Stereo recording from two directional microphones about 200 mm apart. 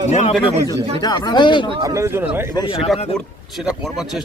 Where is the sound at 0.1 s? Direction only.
35° left (ahead or behind).